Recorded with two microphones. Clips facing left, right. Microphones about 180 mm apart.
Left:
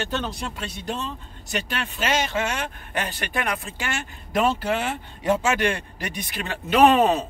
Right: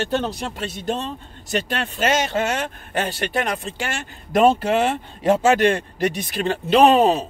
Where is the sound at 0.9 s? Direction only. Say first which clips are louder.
Right 5 dB; 40° right (ahead or behind).